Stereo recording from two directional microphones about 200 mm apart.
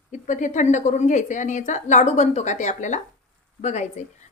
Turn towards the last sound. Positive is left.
turn(degrees=35)  # may be behind; listen again after turning